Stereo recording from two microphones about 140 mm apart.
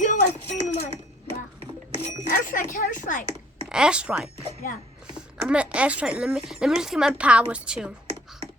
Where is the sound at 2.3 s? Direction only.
70° left (ahead or behind).